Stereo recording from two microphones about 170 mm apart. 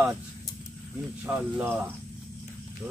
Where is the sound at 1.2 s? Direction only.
10° right (ahead or behind).